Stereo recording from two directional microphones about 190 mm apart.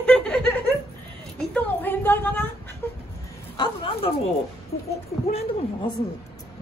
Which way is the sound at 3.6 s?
30° left (ahead or behind).